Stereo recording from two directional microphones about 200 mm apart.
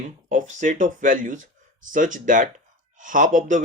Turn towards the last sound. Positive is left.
turn(degrees=-40)  # may be behind; listen again after turning